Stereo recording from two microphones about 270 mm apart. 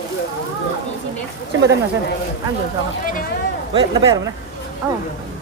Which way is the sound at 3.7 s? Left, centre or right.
Centre.